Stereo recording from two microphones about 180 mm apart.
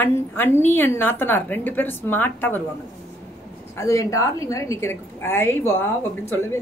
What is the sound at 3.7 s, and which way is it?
Speech, 15° left (ahead or behind).